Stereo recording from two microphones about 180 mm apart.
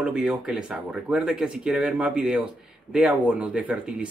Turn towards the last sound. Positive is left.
turn(degrees=-5)  # may be behind; listen again after turning